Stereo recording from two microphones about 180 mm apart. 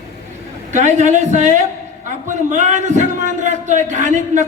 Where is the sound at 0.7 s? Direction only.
40° right (ahead or behind).